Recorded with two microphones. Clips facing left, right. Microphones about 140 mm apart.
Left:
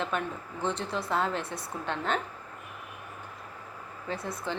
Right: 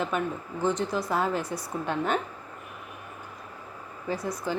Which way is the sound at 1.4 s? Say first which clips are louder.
Right 4 dB; 25° left (ahead or behind).